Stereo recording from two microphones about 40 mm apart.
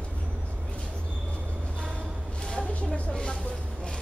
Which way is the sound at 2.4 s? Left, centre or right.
Left.